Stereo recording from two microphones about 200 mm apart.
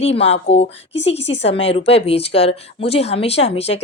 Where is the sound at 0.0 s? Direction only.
30° left (ahead or behind).